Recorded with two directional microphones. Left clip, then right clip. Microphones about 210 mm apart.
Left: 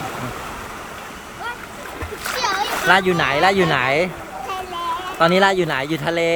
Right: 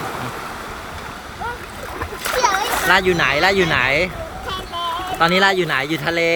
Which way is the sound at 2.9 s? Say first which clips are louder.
Even; 15° left (ahead or behind).